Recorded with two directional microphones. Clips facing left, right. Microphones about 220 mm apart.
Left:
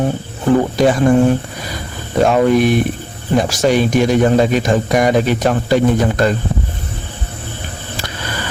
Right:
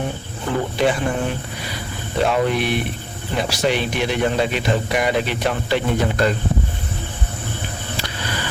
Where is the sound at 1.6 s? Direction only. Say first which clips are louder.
Left 2 dB; 45° left (ahead or behind).